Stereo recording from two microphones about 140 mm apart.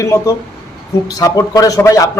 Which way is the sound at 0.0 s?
20° left (ahead or behind).